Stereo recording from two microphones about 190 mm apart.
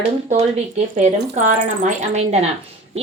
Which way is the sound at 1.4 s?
40° right (ahead or behind).